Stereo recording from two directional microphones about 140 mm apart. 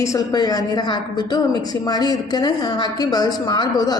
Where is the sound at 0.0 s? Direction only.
25° left (ahead or behind).